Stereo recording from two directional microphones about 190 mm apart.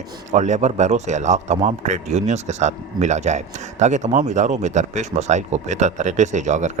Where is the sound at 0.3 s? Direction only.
40° right (ahead or behind).